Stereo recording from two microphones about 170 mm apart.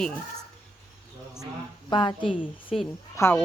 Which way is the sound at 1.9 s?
25° left (ahead or behind).